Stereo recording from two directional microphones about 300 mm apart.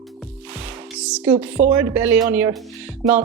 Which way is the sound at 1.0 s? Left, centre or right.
Centre.